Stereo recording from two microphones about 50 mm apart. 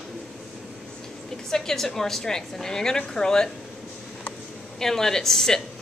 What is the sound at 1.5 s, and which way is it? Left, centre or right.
A woman's voice, centre.